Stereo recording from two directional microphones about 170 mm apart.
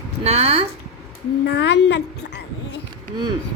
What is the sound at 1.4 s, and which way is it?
Speech, 90° left.